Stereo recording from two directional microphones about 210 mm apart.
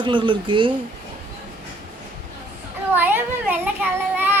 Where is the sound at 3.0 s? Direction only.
10° right (ahead or behind).